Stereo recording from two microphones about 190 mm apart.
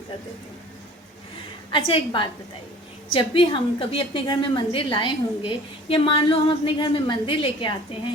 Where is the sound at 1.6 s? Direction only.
25° left (ahead or behind).